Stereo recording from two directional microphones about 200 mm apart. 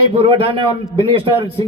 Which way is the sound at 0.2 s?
25° right (ahead or behind).